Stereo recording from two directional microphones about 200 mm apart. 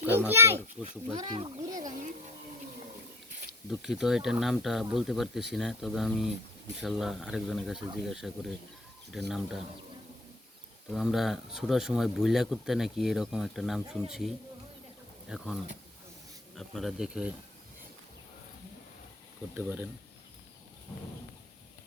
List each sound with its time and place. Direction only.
0.0 s a child's voice: 10° right (ahead or behind)
0.8 s speech: 30° right (ahead or behind)
3.7 s speech: centre (ahead or behind)
10.9 s speech: centre (ahead or behind)
19.5 s a child's voice: 10° right (ahead or behind)